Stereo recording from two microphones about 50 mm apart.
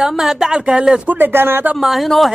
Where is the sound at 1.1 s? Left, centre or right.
Right.